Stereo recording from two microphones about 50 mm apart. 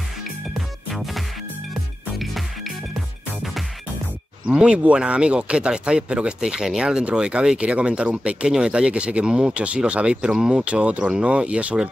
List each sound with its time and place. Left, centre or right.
0.2 s music: centre
4.5 s speech: right
8.5 s speech: centre